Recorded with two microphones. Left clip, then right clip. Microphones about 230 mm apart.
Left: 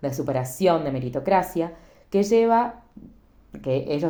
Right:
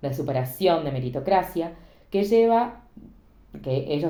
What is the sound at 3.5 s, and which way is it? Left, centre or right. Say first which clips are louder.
Speech: left 3 dB; left.